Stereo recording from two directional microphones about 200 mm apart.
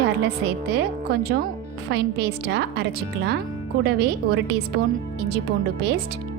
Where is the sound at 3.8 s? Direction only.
55° right (ahead or behind).